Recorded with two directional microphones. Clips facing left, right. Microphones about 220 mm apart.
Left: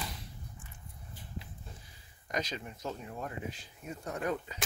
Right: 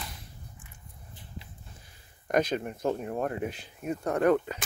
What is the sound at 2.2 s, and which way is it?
Speech, 55° right (ahead or behind).